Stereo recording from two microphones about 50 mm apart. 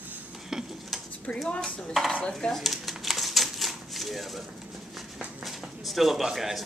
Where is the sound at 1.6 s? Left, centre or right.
Centre.